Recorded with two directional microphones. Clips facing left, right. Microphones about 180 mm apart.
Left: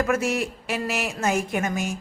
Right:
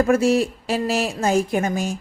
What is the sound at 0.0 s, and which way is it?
A woman's voice, 30° right (ahead or behind).